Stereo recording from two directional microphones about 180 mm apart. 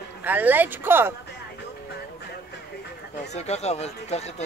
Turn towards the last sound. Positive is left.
turn(degrees=35)  # may be behind; listen again after turning